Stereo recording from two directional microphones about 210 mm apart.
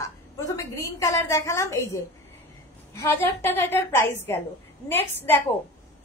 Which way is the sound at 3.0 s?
10° left (ahead or behind).